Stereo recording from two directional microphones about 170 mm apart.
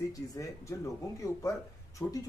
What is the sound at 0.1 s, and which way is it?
Speech, 20° left (ahead or behind).